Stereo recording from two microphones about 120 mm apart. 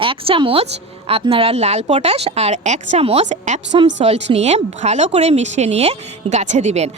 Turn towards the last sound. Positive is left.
turn(degrees=-70)  # may be behind; listen again after turning